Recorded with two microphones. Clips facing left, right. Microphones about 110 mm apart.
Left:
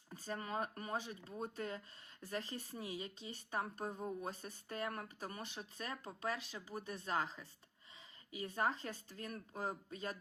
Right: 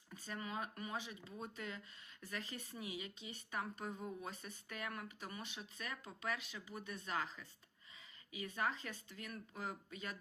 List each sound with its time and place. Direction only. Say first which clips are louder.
0.1 s speech: left 3 dB; 40° left (ahead or behind)